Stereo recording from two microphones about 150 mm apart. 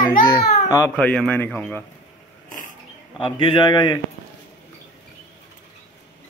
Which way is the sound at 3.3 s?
35° left (ahead or behind).